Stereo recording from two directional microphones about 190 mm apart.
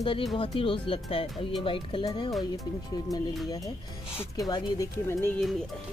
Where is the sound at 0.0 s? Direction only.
30° left (ahead or behind).